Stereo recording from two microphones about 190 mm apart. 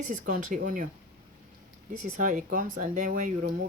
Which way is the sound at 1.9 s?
40° right (ahead or behind).